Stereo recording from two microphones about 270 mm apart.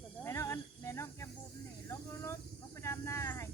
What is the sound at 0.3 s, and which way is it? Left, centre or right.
Snake, centre.